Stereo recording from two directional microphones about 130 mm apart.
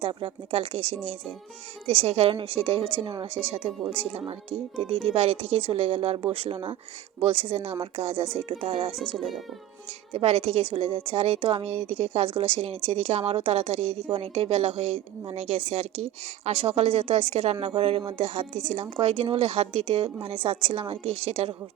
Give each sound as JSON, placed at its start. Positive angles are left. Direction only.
{"t": 0.0, "sound": "a woman's voice", "side_deg": -45}
{"t": 9.1, "sound": "a child's voice", "side_deg": 0}
{"t": 10.1, "sound": "a woman's voice", "side_deg": -50}